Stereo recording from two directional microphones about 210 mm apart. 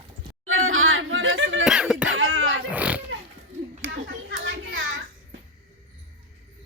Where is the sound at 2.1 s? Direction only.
70° right (ahead or behind).